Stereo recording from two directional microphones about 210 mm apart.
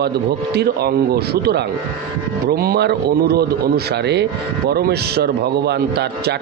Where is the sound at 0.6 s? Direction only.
50° right (ahead or behind).